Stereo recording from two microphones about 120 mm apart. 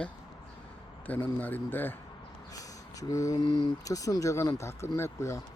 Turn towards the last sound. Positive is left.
turn(degrees=25)  # may be behind; listen again after turning